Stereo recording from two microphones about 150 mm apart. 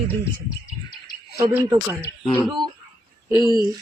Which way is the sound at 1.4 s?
15° right (ahead or behind).